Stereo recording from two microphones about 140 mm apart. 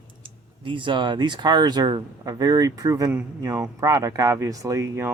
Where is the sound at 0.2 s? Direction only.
35° right (ahead or behind).